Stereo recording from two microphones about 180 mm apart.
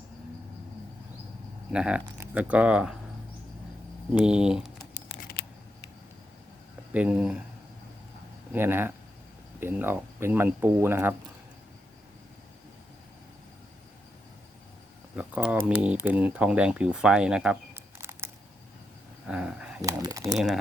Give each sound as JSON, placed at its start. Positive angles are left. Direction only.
{"t": 1.7, "sound": "speech", "side_deg": -5}
{"t": 4.1, "sound": "speech", "side_deg": -5}
{"t": 5.4, "sound": "scissors", "side_deg": 65}
{"t": 6.9, "sound": "speech", "side_deg": -5}
{"t": 8.5, "sound": "speech", "side_deg": -10}
{"t": 15.1, "sound": "a sound", "side_deg": -10}
{"t": 15.8, "sound": "speech", "side_deg": -5}
{"t": 19.3, "sound": "a sound", "side_deg": -5}
{"t": 19.8, "sound": "speech", "side_deg": -20}